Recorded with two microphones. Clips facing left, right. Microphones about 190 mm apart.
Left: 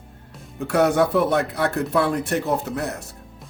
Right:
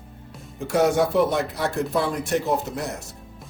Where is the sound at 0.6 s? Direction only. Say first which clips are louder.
Left 1 dB; 65° left (ahead or behind).